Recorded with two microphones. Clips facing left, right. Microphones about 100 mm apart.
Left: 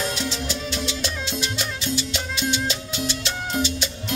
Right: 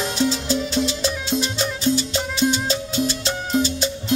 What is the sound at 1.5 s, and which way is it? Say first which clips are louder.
Music: right 6 dB; 35° right (ahead or behind).